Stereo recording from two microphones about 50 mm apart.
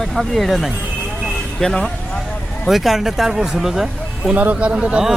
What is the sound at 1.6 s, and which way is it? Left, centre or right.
Speech, centre.